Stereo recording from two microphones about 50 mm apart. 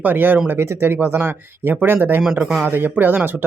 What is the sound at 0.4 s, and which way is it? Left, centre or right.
Speech, right.